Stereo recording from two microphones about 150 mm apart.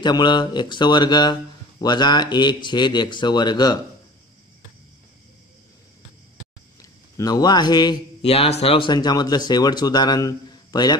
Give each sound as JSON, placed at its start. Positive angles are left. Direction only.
{"t": 0.0, "sound": "speech", "side_deg": 30}
{"t": 7.2, "sound": "speech", "side_deg": 25}
{"t": 8.3, "sound": "speech", "side_deg": 45}